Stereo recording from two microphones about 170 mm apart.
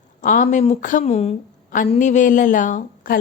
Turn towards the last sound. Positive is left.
turn(degrees=50)  # may be behind; listen again after turning